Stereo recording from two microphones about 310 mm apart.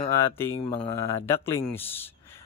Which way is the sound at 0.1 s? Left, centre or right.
Centre.